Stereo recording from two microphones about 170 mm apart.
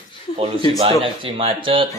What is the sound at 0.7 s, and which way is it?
Speech, 35° right (ahead or behind).